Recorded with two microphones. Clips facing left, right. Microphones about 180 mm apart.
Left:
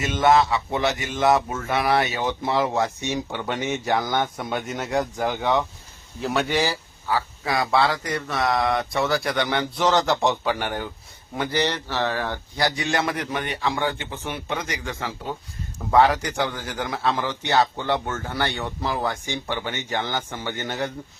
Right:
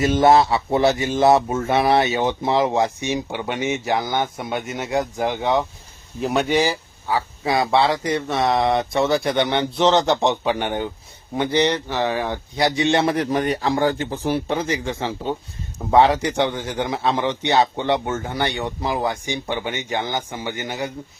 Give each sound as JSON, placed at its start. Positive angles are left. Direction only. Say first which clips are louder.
{"t": 0.0, "sound": "a man's voice", "louder": "right 4 dB", "side_deg": -35}